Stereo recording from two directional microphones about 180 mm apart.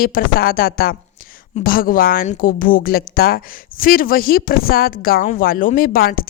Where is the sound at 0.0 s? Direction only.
55° left (ahead or behind).